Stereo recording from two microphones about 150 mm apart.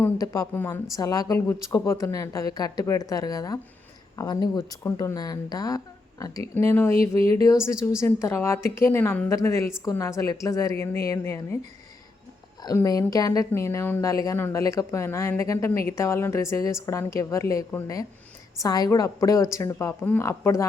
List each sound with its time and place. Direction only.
0.0 s a woman's voice: 20° left (ahead or behind)
12.6 s speech: 25° left (ahead or behind)